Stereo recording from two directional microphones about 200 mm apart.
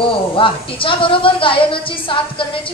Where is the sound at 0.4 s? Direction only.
25° left (ahead or behind).